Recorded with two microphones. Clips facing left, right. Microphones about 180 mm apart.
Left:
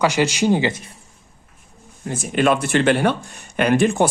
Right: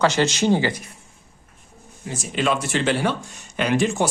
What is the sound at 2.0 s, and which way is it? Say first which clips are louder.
Speech: left 5 dB; 55° left (ahead or behind).